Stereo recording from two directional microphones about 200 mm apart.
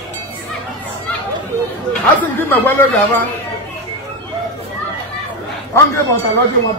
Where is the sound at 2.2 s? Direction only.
10° left (ahead or behind).